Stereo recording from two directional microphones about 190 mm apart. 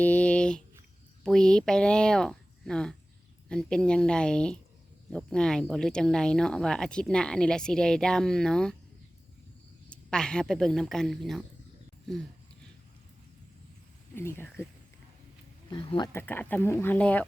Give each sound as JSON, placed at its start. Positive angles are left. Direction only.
{"t": 0.0, "sound": "a sound", "side_deg": 5}
{"t": 1.2, "sound": "speech", "side_deg": 5}
{"t": 9.9, "sound": "speech", "side_deg": 5}
{"t": 14.2, "sound": "speech", "side_deg": 10}
{"t": 15.7, "sound": "speech", "side_deg": 25}
{"t": 16.1, "sound": "speech", "side_deg": 10}